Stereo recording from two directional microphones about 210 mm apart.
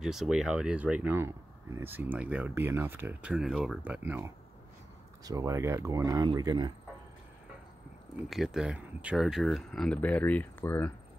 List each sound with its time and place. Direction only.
0.0 s speech: centre (ahead or behind); by 6.7 s 20° right (ahead or behind)
8.3 s speech: centre (ahead or behind)